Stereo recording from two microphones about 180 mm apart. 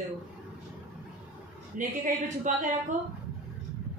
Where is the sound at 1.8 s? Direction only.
45° right (ahead or behind).